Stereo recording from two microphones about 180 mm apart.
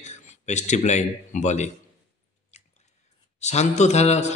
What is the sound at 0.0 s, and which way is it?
Speech, 40° left (ahead or behind).